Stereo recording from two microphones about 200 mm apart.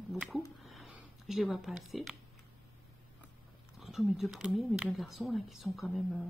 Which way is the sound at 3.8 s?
Centre (ahead or behind).